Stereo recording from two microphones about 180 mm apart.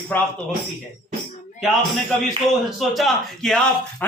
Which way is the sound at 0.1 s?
10° left (ahead or behind).